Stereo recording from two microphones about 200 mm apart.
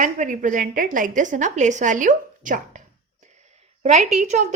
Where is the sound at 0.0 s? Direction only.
40° right (ahead or behind).